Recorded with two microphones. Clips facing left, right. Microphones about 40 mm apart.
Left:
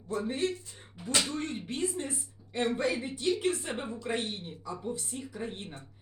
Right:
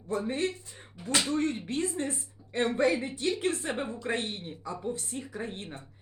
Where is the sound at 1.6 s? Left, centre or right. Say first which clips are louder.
Right 2 dB; right.